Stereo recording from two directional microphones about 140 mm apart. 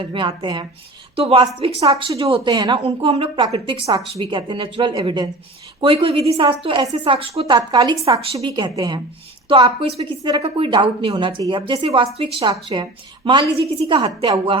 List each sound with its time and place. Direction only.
0.0 s a woman's voice: 35° right (ahead or behind)
1.1 s a woman's voice: 45° right (ahead or behind)
2.8 s a woman's voice: 45° right (ahead or behind)